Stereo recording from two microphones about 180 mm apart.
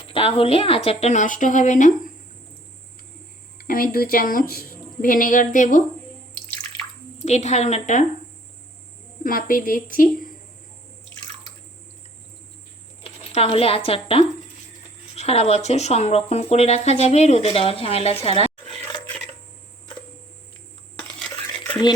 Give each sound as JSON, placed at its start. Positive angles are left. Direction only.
{"t": 0.1, "sound": "speech", "side_deg": 30}
{"t": 3.6, "sound": "a sound", "side_deg": 55}
{"t": 3.9, "sound": "a woman's voice", "side_deg": 55}
{"t": 7.2, "sound": "speech", "side_deg": 40}
{"t": 9.2, "sound": "a woman's voice", "side_deg": 50}
{"t": 13.0, "sound": "speech", "side_deg": 30}
{"t": 21.7, "sound": "a sound", "side_deg": 25}